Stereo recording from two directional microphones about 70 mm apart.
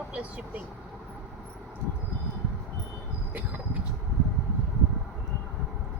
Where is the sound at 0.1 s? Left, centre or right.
Centre.